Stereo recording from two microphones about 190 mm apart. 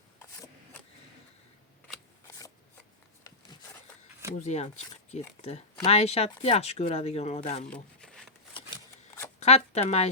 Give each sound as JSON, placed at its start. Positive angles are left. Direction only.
{"t": 4.4, "sound": "speech", "side_deg": 35}
{"t": 7.7, "sound": "shuffling cards", "side_deg": 5}
{"t": 9.4, "sound": "a sound", "side_deg": 35}